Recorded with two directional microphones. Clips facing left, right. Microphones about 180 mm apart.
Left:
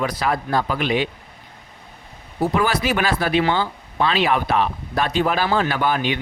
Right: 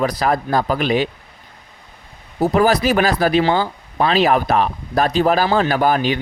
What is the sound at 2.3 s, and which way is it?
Speech, 40° right (ahead or behind).